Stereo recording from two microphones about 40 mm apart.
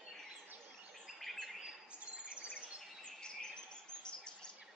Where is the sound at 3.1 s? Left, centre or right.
Left.